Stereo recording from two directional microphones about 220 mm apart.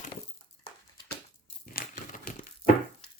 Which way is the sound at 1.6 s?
40° left (ahead or behind).